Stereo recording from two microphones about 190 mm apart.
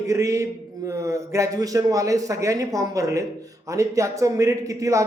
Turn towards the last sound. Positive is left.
turn(degrees=-15)  # may be behind; listen again after turning